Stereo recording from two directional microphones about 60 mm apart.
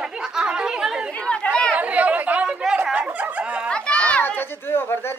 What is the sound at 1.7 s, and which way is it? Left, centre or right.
Chatter, right.